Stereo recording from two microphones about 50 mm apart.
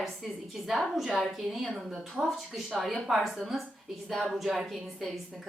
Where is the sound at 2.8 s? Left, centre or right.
Centre.